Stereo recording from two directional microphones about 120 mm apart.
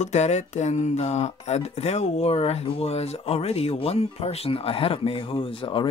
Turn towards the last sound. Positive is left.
turn(degrees=45)  # may be behind; listen again after turning